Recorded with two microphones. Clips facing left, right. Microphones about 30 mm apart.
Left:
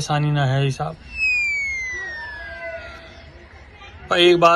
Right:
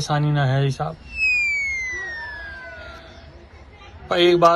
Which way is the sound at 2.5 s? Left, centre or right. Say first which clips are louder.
Left 5 dB; left.